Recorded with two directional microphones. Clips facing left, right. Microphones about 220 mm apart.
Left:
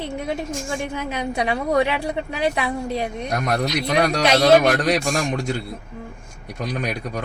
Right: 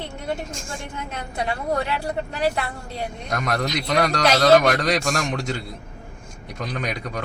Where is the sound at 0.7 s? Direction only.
85° left; by 2.1 s 70° left (ahead or behind).